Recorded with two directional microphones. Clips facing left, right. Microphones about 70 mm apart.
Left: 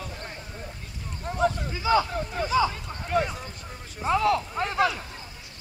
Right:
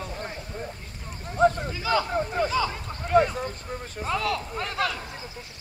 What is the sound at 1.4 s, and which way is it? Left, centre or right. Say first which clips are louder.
Boat: right 4 dB; right.